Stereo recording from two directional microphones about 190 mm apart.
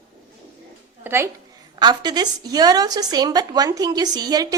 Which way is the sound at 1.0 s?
10° right (ahead or behind).